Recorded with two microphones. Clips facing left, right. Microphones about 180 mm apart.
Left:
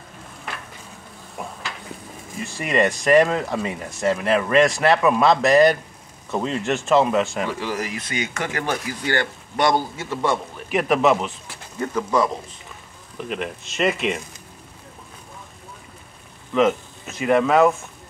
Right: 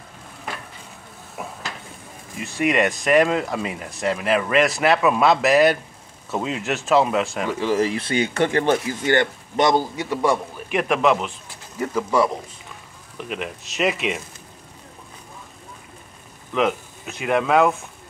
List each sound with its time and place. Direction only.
1.4 s stir: 5° right (ahead or behind)
2.4 s speech: centre (ahead or behind)
7.4 s speech: 20° right (ahead or behind)
10.7 s speech: centre (ahead or behind)
11.8 s speech: 10° right (ahead or behind)
16.5 s speech: centre (ahead or behind)